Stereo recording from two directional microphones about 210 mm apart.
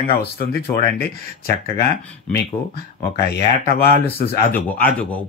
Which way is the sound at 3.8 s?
45° left (ahead or behind).